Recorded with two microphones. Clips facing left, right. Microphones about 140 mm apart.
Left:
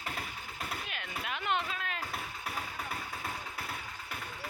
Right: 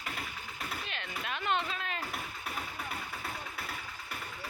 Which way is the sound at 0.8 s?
10° left (ahead or behind).